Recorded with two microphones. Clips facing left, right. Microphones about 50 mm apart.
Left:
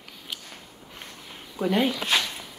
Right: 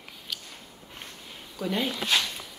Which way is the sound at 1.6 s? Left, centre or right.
Left.